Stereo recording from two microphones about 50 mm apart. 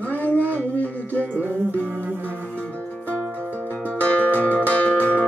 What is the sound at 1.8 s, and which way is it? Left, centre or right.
Music, right.